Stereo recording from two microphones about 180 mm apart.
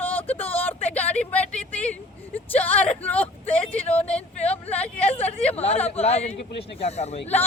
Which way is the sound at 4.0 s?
35° left (ahead or behind).